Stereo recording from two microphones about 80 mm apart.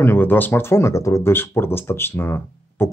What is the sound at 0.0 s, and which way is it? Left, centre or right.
Speech, left.